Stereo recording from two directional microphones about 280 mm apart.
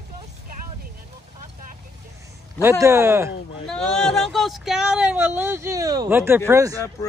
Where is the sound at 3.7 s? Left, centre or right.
Centre.